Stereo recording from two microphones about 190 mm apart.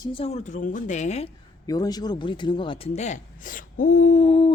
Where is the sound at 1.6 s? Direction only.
20° left (ahead or behind).